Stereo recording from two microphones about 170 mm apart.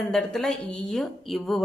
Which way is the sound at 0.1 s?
5° left (ahead or behind).